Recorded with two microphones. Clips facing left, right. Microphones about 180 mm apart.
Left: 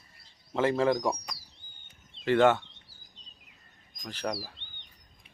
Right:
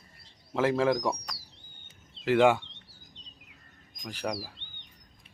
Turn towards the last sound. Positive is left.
turn(degrees=-10)  # may be behind; listen again after turning